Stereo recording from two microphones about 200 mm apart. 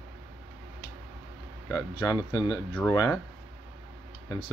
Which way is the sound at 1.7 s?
20° left (ahead or behind).